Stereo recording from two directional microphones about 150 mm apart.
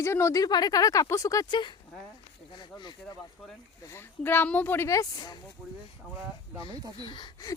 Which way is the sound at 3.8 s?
15° left (ahead or behind).